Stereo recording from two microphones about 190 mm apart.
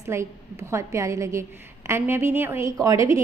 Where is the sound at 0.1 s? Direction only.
15° right (ahead or behind).